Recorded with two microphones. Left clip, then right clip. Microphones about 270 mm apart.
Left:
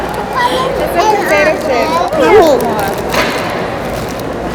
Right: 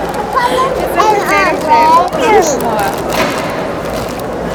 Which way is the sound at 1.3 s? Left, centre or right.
Centre.